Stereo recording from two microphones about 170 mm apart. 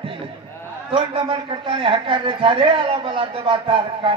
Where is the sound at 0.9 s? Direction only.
30° right (ahead or behind).